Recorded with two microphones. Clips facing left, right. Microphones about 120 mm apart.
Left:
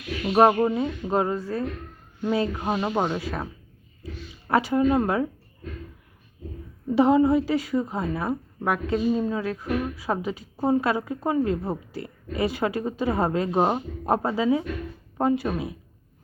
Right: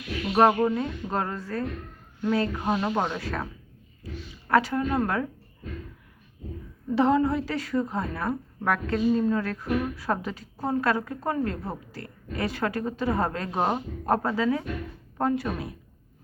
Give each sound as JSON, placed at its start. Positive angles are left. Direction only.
{"t": 0.6, "sound": "a woman's voice", "side_deg": 15}
{"t": 6.9, "sound": "a woman's voice", "side_deg": 15}